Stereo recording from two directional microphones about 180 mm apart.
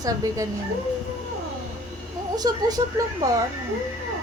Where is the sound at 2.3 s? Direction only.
20° right (ahead or behind).